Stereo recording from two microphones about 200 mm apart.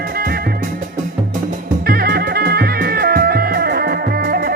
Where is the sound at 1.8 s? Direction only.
50° right (ahead or behind).